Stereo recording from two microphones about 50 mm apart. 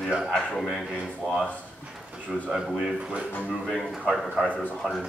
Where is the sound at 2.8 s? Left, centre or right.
Centre.